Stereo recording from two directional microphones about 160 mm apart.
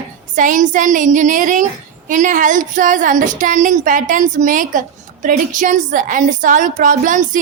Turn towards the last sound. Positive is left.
turn(degrees=-55)  # may be behind; listen again after turning